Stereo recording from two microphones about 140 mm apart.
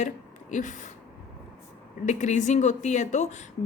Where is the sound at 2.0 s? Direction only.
60° left (ahead or behind).